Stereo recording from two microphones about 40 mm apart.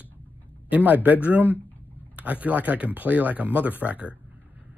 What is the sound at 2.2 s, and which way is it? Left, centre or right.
Speech, right.